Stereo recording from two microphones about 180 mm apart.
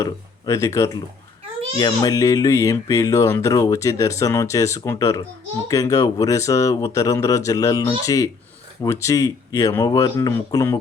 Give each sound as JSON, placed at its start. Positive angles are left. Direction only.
{"t": 0.0, "sound": "speech", "side_deg": 15}